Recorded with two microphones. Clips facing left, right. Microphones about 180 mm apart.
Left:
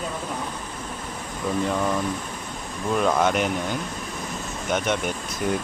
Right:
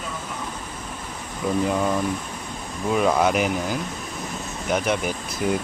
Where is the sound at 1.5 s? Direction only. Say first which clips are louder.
Right 2 dB; 5° right (ahead or behind).